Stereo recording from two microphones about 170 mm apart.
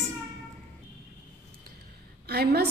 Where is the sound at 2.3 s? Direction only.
65° right (ahead or behind).